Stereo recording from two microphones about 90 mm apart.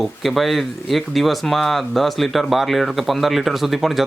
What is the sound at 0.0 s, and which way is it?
Speech, centre (ahead or behind).